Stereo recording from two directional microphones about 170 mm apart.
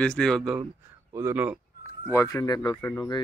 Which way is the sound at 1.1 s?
15° right (ahead or behind).